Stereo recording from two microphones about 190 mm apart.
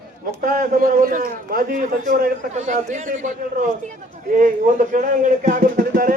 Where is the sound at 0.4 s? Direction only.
45° right (ahead or behind).